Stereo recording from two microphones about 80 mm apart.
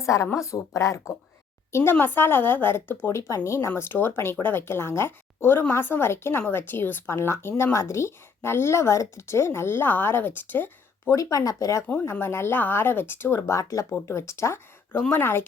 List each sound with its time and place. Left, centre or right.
0.0 s a woman's voice: left
3.8 s speech: left
11.1 s speech: left
12.2 s speech: left
13.6 s speech: left